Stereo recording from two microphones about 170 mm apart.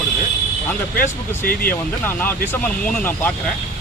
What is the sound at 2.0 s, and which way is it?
Speech, 10° left (ahead or behind).